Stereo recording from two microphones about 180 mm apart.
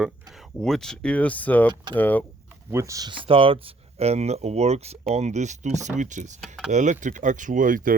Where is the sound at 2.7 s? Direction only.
15° right (ahead or behind); by 6.4 s 45° right (ahead or behind).